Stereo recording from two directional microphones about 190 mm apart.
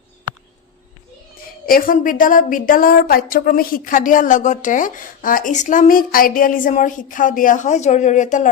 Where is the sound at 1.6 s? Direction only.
45° left (ahead or behind).